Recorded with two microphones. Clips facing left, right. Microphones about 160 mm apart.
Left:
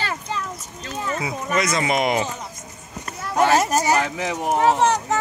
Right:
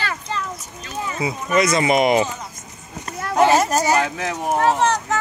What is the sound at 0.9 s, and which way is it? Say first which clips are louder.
Speech: right 1 dB; 10° right (ahead or behind).